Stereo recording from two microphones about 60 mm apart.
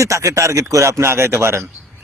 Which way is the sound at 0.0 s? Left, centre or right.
Right.